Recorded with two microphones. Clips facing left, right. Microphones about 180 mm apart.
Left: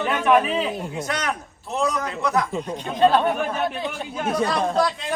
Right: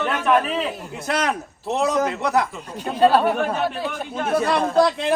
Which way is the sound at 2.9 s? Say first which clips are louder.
Right 2 dB; 5° right (ahead or behind).